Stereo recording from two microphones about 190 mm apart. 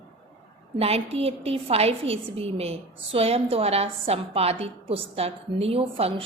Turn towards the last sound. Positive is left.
turn(degrees=-30)  # may be behind; listen again after turning